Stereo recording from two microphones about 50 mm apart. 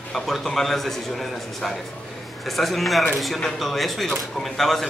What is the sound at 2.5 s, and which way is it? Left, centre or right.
A man's voice, centre.